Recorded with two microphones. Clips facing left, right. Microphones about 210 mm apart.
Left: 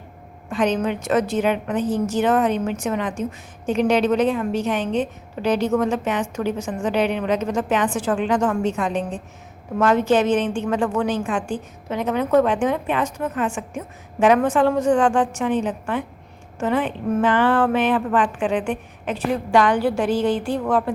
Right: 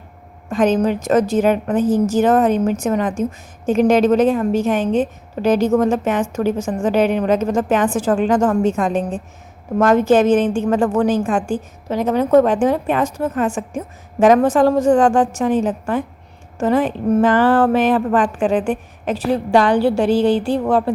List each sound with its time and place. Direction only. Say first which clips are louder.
0.5 s a woman's voice: right 5 dB; 45° right (ahead or behind)
1.8 s a woman's voice: right 6 dB; 90° right
2.1 s a woman's voice: right 3 dB; 45° right (ahead or behind)